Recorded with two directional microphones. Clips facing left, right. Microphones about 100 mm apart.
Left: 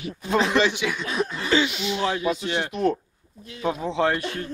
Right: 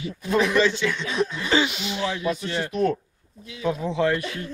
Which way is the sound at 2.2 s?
20° left (ahead or behind).